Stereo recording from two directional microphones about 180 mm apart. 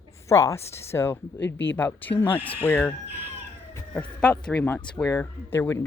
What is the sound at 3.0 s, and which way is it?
Speech, 10° right (ahead or behind).